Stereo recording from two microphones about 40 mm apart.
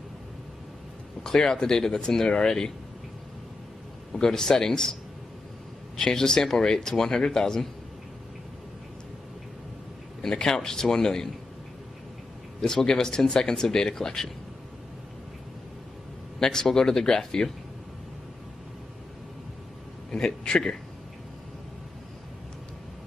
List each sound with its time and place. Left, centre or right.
1.2 s speech: centre
4.1 s speech: centre
5.9 s speech: centre
10.2 s speech: centre
12.6 s speech: centre
16.3 s speech: centre
20.1 s a man's voice: centre